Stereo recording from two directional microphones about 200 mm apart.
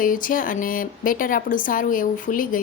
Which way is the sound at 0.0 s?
40° left (ahead or behind).